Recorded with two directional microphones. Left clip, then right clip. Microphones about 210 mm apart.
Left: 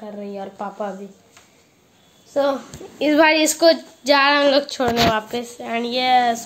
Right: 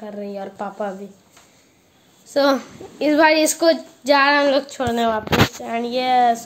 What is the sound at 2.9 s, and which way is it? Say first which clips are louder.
A woman's voice: even; centre (ahead or behind).